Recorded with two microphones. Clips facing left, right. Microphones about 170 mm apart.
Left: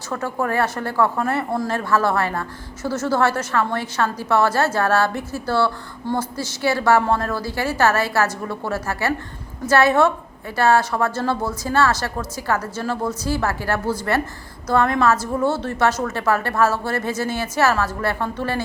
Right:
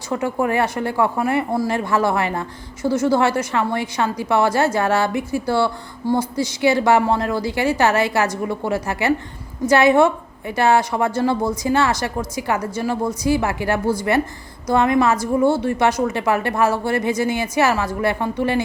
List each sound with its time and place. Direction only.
0.1 s speech: 15° right (ahead or behind)